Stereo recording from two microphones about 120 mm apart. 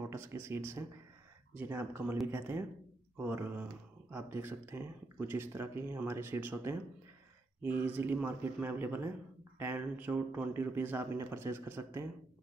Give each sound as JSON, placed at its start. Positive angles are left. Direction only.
{"t": 0.0, "sound": "speech", "side_deg": -20}